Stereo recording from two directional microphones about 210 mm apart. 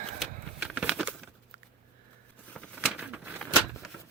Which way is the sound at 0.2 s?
5° right (ahead or behind).